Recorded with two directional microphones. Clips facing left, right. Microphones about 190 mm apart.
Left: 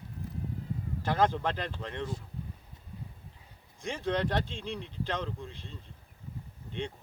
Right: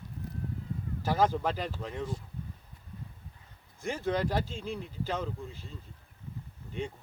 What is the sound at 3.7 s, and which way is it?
Speech, 5° right (ahead or behind).